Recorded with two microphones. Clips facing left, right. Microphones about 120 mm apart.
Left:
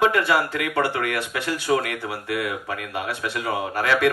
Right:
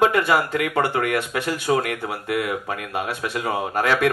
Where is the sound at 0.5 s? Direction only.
25° right (ahead or behind).